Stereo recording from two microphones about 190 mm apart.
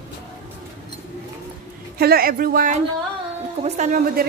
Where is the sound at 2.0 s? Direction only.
50° right (ahead or behind).